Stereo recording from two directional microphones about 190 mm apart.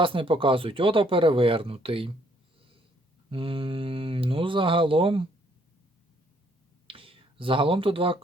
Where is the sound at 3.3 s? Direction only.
30° right (ahead or behind).